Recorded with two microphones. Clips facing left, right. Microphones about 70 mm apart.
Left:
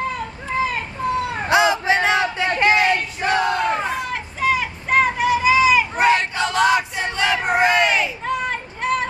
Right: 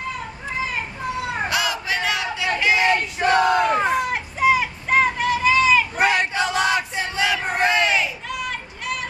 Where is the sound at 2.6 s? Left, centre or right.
Left.